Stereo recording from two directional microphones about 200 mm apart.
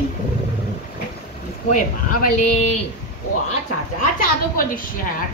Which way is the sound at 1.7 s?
40° left (ahead or behind).